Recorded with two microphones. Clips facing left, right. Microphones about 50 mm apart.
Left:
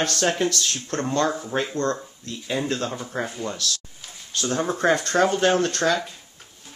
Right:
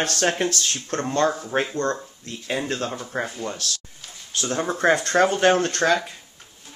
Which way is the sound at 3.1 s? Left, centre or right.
Centre.